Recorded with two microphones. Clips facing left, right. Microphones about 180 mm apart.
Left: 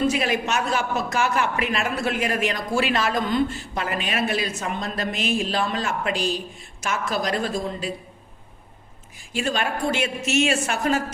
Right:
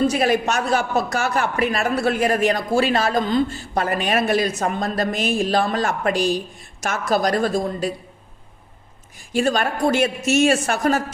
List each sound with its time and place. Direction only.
0.0 s a woman's voice: 40° right (ahead or behind)
9.4 s a woman's voice: 45° right (ahead or behind)